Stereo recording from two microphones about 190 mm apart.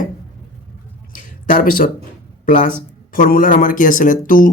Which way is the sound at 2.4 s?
45° left (ahead or behind).